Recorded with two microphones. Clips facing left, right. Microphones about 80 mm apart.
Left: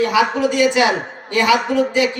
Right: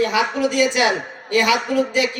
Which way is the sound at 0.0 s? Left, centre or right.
Left.